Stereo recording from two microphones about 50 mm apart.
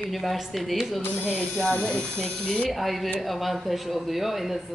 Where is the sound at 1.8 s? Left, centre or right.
Centre.